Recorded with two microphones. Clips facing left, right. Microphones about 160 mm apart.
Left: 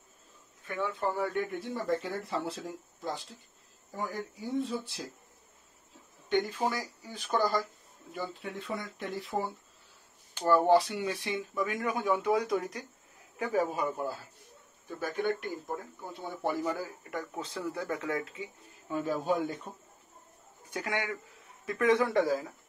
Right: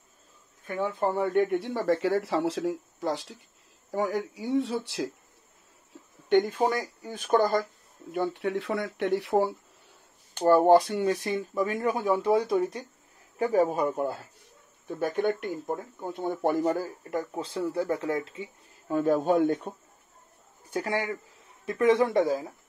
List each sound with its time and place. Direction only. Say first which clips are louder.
0.7 s speech: right 4 dB; 40° right (ahead or behind)
1.3 s speech: right 8 dB; 70° right (ahead or behind); by 5.1 s 90° right
6.2 s speech: right 6 dB; 55° right (ahead or behind)
8.1 s speech: right 10 dB; 65° right (ahead or behind)
10.4 s speech: right 5 dB; 45° right (ahead or behind); by 12.8 s 25° right (ahead or behind)
13.4 s speech: right 6 dB; 35° right (ahead or behind)
15.0 s speech: right 5 dB; 60° right (ahead or behind); by 18.5 s 30° right (ahead or behind)
18.9 s speech: right 7 dB; 50° right (ahead or behind)
20.7 s speech: right 5 dB; 30° right (ahead or behind)